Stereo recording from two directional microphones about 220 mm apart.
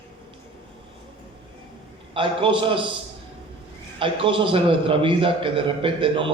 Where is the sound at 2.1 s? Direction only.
25° right (ahead or behind).